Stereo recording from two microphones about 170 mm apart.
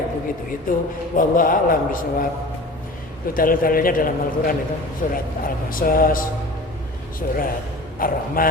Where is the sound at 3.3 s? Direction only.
55° left (ahead or behind).